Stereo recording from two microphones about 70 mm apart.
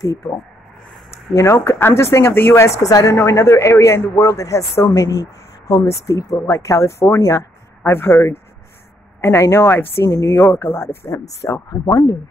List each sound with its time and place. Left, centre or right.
0.0 s speech: left
1.3 s speech: left
2.8 s speech: left
3.2 s a man's voice: left
5.9 s a man's voice: left
7.2 s speech: left
7.8 s speech: left
11.1 s a man's voice: left
11.8 s speech: left